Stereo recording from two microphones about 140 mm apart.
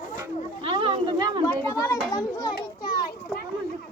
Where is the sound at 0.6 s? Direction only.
40° right (ahead or behind).